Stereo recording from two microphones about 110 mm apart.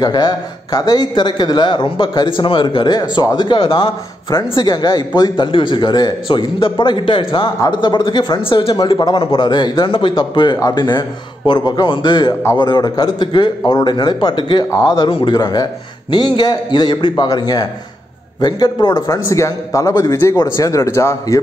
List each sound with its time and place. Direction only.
0.0 s a man's voice: 35° left (ahead or behind); by 8.7 s 55° left (ahead or behind)
8.7 s a man's voice: 40° left (ahead or behind)